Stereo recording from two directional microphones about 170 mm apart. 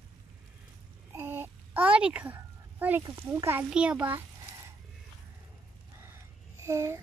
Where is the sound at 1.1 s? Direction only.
15° right (ahead or behind).